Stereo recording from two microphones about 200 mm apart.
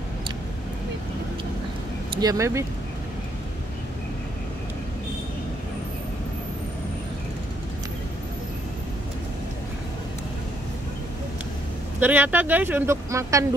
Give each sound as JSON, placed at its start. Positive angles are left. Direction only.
{"t": 2.1, "sound": "speech", "side_deg": -15}
{"t": 12.0, "sound": "speech", "side_deg": -10}